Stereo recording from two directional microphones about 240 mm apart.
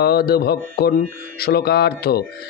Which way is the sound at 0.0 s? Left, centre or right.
Left.